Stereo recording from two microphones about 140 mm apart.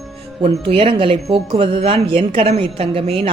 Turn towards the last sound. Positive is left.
turn(degrees=-40)  # may be behind; listen again after turning